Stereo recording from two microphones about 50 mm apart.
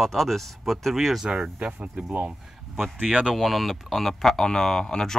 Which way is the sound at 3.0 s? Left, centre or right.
Right.